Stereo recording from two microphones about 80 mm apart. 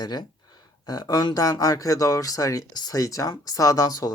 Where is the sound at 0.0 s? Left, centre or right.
Left.